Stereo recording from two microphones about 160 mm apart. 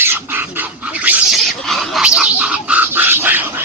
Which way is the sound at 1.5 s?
Centre (ahead or behind).